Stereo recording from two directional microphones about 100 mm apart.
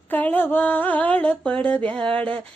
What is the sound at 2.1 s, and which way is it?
Speech, 65° right (ahead or behind).